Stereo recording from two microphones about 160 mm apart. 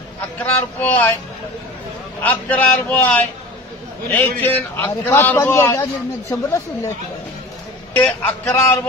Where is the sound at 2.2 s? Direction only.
10° left (ahead or behind).